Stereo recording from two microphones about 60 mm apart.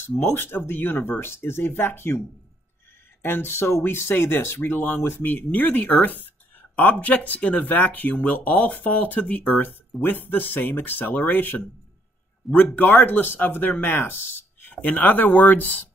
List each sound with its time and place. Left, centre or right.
0.2 s speech: left